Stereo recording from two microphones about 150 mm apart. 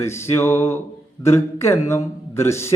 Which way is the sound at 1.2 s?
20° left (ahead or behind).